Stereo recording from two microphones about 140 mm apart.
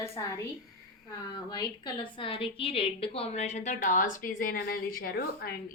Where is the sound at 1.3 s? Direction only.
30° left (ahead or behind).